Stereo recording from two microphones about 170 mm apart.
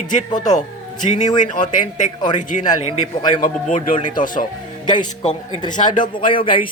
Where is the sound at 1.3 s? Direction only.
25° left (ahead or behind).